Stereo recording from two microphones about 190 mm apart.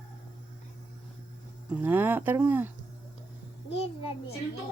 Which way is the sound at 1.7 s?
10° right (ahead or behind).